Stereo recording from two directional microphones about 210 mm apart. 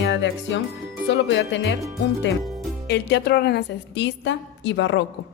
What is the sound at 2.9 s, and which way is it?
Speech, 55° left (ahead or behind).